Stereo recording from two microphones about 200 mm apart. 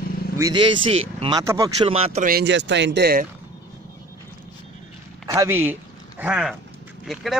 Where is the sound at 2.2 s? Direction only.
55° right (ahead or behind).